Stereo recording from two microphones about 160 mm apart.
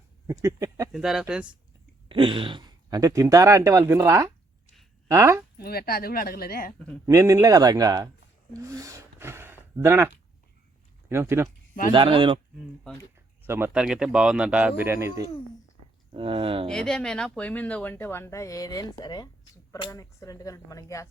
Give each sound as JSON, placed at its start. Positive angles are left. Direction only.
{"t": 0.4, "sound": "speech", "side_deg": -20}
{"t": 0.9, "sound": "speech", "side_deg": -5}
{"t": 2.0, "sound": "speech", "side_deg": -30}
{"t": 5.5, "sound": "speech", "side_deg": 75}
{"t": 7.0, "sound": "speech", "side_deg": -20}
{"t": 11.1, "sound": "speech", "side_deg": -15}
{"t": 11.9, "sound": "speech", "side_deg": -30}
{"t": 13.1, "sound": "a sound", "side_deg": -15}
{"t": 13.8, "sound": "speech", "side_deg": -5}
{"t": 16.1, "sound": "speech", "side_deg": -35}
{"t": 16.6, "sound": "speech", "side_deg": 5}